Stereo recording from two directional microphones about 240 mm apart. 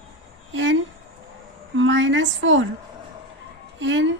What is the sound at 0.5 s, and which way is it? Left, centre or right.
A woman's voice, right.